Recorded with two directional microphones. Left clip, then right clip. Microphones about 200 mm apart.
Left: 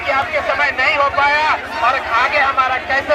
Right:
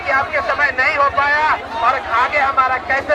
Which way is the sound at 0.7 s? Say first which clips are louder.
Even; 20° right (ahead or behind).